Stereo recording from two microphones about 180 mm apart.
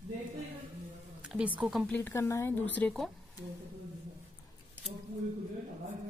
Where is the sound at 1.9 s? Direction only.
15° left (ahead or behind).